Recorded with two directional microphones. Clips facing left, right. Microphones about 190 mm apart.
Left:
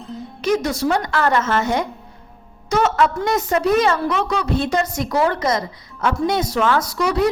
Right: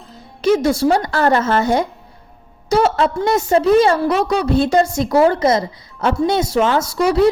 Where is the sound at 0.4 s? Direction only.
30° right (ahead or behind).